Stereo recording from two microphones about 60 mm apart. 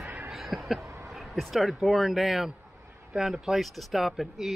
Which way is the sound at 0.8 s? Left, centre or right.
Right.